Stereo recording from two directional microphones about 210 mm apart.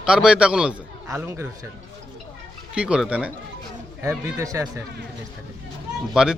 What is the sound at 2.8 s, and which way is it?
Speech, 5° right (ahead or behind).